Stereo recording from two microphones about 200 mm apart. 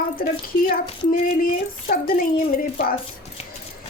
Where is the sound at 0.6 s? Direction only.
45° left (ahead or behind).